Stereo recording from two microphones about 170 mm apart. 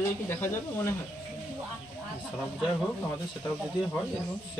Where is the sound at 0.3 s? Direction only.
15° left (ahead or behind).